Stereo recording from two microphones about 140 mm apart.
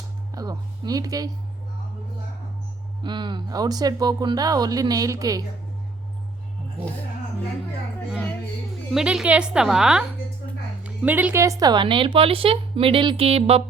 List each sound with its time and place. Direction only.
0.3 s music: 25° right (ahead or behind)
3.0 s speech: 30° right (ahead or behind)
8.9 s a woman's voice: 5° right (ahead or behind); by 13.6 s 45° right (ahead or behind)